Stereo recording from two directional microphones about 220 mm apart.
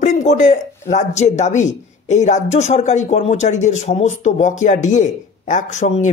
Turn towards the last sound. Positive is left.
turn(degrees=35)  # may be behind; listen again after turning